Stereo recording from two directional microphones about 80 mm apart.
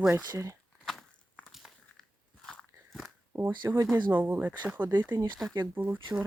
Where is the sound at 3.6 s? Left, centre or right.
Right.